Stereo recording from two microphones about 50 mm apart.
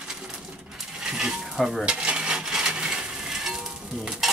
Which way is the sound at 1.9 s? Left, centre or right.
Right.